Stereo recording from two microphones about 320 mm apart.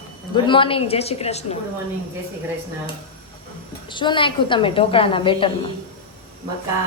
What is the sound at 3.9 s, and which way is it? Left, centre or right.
A woman's voice, centre.